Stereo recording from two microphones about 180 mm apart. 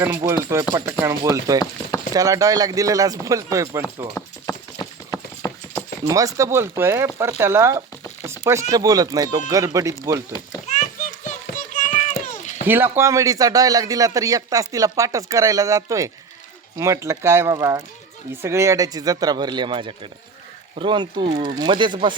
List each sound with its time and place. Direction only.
0.2 s a man's voice: 15° right (ahead or behind)
5.1 s clip-clop: 20° left (ahead or behind)
6.1 s speech: 20° right (ahead or behind)
8.2 s chopping: 15° right (ahead or behind)
8.7 s a man's voice: 20° right (ahead or behind)
10.7 s a sound: 40° left (ahead or behind)
12.6 s a man's voice: 10° right (ahead or behind)